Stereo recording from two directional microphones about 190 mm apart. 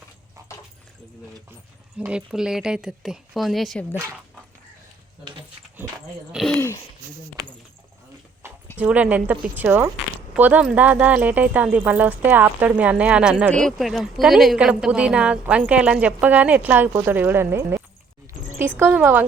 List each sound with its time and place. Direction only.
2.0 s speech: 5° right (ahead or behind)
3.9 s a woman's voice: 10° right (ahead or behind)
6.3 s speech: centre (ahead or behind)
6.6 s a sound: 15° left (ahead or behind)
8.4 s a sound: 10° right (ahead or behind)
8.8 s a woman's voice: 5° right (ahead or behind)